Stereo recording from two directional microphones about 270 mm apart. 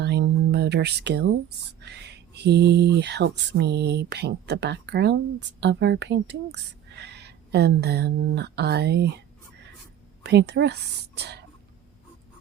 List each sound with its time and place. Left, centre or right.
0.0 s speech: right
10.2 s speech: right